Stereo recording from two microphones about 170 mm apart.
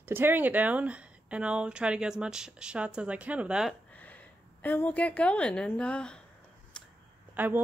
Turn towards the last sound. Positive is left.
turn(degrees=-10)  # may be behind; listen again after turning